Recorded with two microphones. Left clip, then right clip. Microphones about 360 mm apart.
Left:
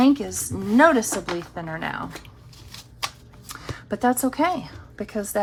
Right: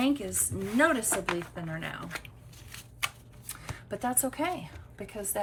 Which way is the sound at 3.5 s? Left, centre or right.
Centre.